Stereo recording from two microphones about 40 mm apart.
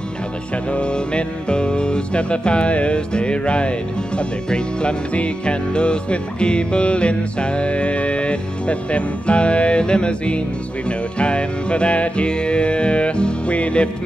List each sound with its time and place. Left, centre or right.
0.7 s music: left